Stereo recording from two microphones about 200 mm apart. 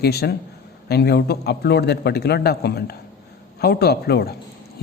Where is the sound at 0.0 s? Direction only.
55° left (ahead or behind).